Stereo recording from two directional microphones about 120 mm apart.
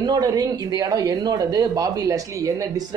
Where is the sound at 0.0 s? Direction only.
35° right (ahead or behind).